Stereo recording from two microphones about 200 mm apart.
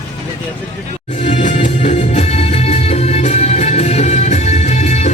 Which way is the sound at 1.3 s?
40° left (ahead or behind).